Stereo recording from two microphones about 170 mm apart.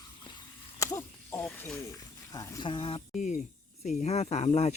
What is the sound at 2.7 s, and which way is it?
Speech, 30° left (ahead or behind).